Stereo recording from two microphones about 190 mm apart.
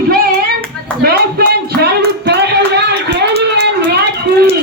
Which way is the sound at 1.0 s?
55° right (ahead or behind).